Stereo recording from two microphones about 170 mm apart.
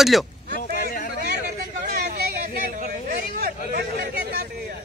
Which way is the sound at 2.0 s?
65° right (ahead or behind).